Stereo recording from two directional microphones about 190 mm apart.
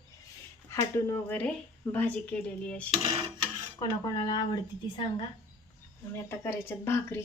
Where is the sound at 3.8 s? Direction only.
20° left (ahead or behind).